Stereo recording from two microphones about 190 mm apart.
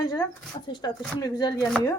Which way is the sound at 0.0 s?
20° left (ahead or behind).